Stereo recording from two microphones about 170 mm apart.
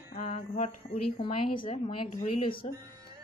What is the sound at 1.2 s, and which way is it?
A woman's voice, 30° left (ahead or behind).